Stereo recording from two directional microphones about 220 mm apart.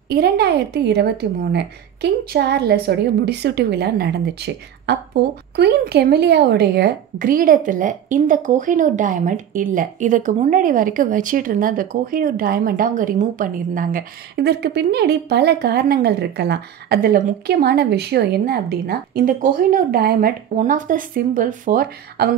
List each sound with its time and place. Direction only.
0.1 s speech: 45° right (ahead or behind)